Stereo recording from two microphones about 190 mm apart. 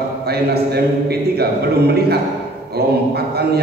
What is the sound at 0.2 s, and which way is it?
A man's voice, 55° right (ahead or behind).